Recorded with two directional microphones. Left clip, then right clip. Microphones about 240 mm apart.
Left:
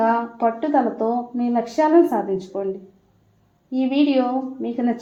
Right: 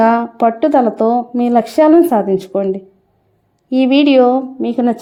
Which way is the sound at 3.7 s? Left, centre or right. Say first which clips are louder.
Right 9 dB; right.